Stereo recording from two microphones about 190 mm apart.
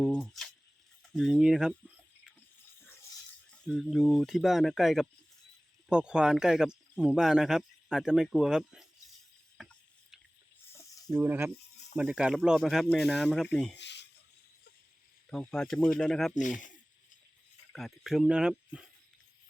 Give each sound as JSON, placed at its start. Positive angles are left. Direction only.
{"t": 0.0, "sound": "speech", "side_deg": 0}
{"t": 3.7, "sound": "speech", "side_deg": 0}
{"t": 9.6, "sound": "a sound", "side_deg": 0}
{"t": 11.2, "sound": "speech", "side_deg": -10}
{"t": 13.7, "sound": "a sound", "side_deg": 65}
{"t": 15.3, "sound": "speech", "side_deg": 5}
{"t": 17.7, "sound": "speech", "side_deg": 0}